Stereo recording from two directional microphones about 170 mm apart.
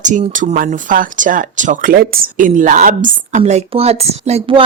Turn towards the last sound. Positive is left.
turn(degrees=-40)  # may be behind; listen again after turning